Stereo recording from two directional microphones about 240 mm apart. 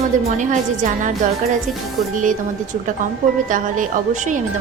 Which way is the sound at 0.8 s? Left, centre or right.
Right.